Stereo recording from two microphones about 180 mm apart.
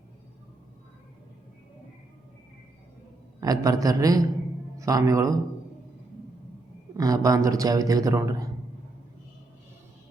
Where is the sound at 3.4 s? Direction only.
20° right (ahead or behind).